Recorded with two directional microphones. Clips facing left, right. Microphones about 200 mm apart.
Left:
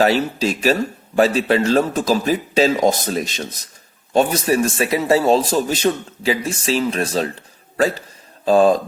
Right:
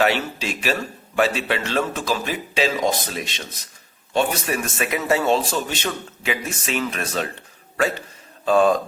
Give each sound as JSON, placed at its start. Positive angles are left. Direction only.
{"t": 0.0, "sound": "speech", "side_deg": 35}